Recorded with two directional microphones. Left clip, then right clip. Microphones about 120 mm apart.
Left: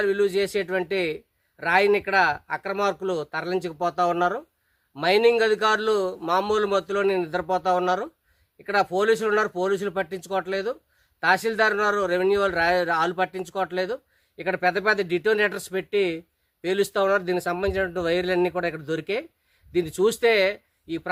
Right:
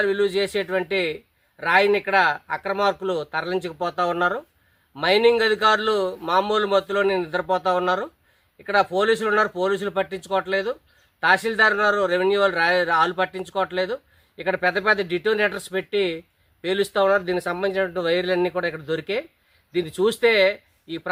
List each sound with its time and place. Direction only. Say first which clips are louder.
0.0 s speech: right 1 dB; 45° left (ahead or behind)